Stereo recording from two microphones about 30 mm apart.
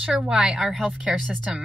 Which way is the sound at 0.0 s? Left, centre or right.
Right.